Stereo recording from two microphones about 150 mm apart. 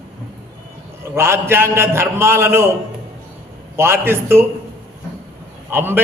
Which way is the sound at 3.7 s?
15° right (ahead or behind).